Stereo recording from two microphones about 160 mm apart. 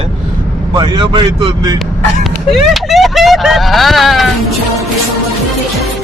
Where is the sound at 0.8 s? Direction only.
30° right (ahead or behind).